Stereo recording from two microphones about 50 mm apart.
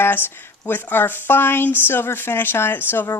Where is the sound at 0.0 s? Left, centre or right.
Left.